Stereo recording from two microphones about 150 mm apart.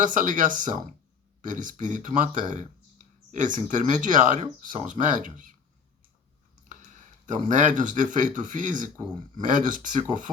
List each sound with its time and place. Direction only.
0.0 s speech: 60° right (ahead or behind)
6.7 s speech: 60° right (ahead or behind)